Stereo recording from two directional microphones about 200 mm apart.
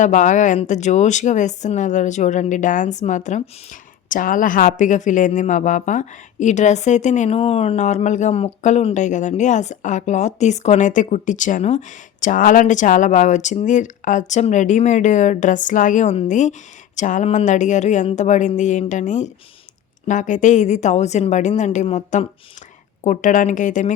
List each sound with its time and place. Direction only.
0.0 s speech: 40° left (ahead or behind)